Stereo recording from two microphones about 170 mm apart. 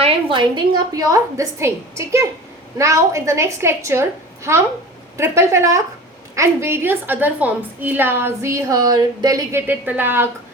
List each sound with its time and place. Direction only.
0.0 s a woman's voice: 30° right (ahead or behind); by 4.0 s 15° right (ahead or behind)
5.1 s a woman's voice: 15° right (ahead or behind)